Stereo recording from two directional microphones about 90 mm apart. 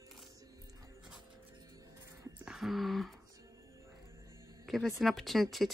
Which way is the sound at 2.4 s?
5° right (ahead or behind).